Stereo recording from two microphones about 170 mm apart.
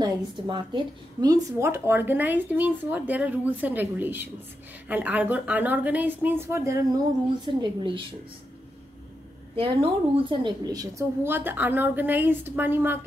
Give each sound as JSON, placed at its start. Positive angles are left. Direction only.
{"t": 0.0, "sound": "speech", "side_deg": -25}
{"t": 7.6, "sound": "a woman's voice", "side_deg": -30}
{"t": 9.6, "sound": "speech", "side_deg": -30}